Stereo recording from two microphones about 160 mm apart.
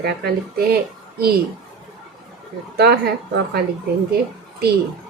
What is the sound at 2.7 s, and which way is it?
Speech, 90° right.